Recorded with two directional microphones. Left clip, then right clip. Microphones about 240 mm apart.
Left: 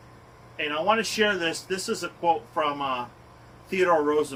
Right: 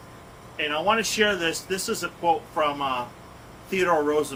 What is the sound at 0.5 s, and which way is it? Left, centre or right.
Speech, centre.